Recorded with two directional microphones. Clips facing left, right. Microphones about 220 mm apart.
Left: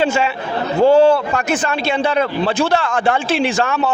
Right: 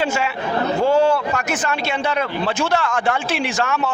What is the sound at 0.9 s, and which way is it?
A man's voice, 30° left (ahead or behind).